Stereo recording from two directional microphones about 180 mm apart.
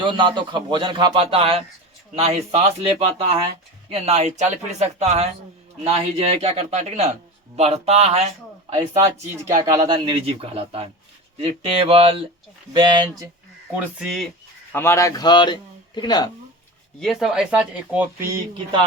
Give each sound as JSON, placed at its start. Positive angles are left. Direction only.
{"t": 0.0, "sound": "a man's voice", "side_deg": -25}
{"t": 9.6, "sound": "a man's voice", "side_deg": -20}
{"t": 13.7, "sound": "speech", "side_deg": -5}
{"t": 14.7, "sound": "speech", "side_deg": 15}
{"t": 17.0, "sound": "speech", "side_deg": 0}